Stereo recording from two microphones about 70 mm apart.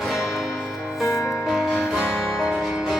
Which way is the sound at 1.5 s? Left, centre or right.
Centre.